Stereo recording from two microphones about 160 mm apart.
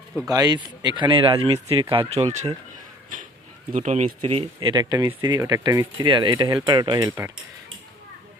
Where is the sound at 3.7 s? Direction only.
45° right (ahead or behind).